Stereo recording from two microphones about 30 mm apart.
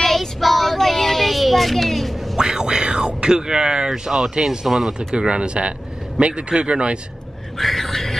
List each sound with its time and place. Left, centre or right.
0.0 s child singing: centre
2.3 s speech: right
4.1 s speech: centre
5.1 s speech: right
7.5 s a sound: centre